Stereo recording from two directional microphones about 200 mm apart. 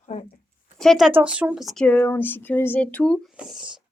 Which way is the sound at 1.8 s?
10° left (ahead or behind).